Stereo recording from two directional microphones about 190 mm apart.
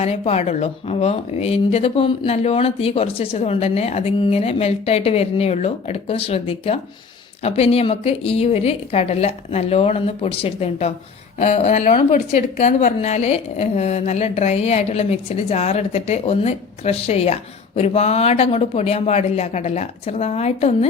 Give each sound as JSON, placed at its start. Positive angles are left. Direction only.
{"t": 0.0, "sound": "speech", "side_deg": 35}